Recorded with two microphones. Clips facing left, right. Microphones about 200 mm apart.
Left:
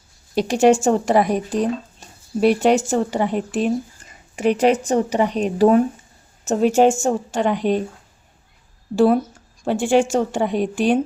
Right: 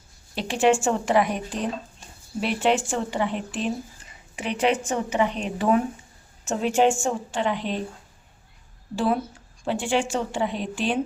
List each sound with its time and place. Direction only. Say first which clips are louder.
0.3 s a woman's voice: left 6 dB; 40° left (ahead or behind)
9.6 s a woman's voice: left 7 dB; 45° left (ahead or behind)